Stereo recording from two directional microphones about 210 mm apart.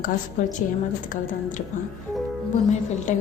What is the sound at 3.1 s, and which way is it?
Speech, 35° left (ahead or behind).